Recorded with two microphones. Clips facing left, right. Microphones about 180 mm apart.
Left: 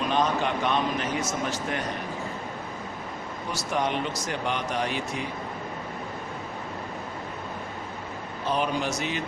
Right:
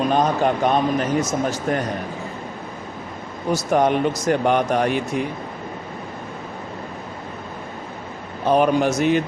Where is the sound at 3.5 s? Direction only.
50° right (ahead or behind).